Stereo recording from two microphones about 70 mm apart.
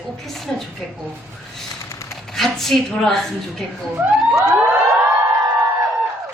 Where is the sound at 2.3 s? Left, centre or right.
Centre.